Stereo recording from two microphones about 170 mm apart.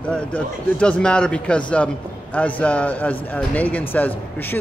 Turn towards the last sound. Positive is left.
turn(degrees=10)  # may be behind; listen again after turning